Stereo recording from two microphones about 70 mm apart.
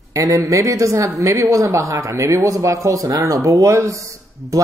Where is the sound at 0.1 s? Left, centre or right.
Right.